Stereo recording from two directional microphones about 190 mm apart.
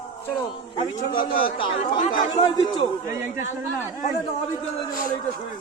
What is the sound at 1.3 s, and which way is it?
Speech, 30° left (ahead or behind).